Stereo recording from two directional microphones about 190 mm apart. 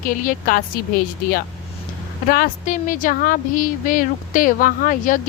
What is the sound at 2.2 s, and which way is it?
A woman's voice, 50° left (ahead or behind).